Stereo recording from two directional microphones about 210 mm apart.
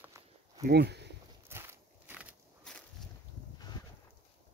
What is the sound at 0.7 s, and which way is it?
Speech, 50° right (ahead or behind).